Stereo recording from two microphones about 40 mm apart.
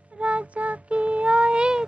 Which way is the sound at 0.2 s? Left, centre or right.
Right.